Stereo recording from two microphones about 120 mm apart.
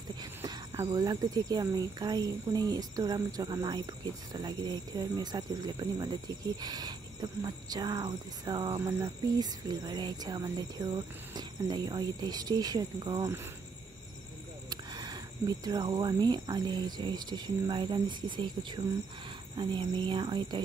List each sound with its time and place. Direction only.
0.2 s a sound: 30° right (ahead or behind)
0.8 s speech: 35° right (ahead or behind)
14.7 s speech: 35° right (ahead or behind)